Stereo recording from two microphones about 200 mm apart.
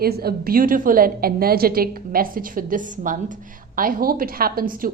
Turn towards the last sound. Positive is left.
turn(degrees=-45)  # may be behind; listen again after turning